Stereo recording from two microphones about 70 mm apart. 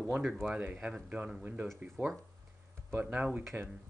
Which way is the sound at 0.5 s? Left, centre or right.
Right.